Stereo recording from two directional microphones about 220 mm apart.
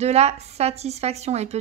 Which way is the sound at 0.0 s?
30° right (ahead or behind).